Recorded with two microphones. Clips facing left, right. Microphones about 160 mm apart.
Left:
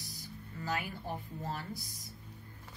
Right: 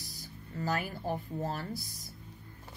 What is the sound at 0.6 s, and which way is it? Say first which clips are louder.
Speech: right 4 dB; 40° right (ahead or behind).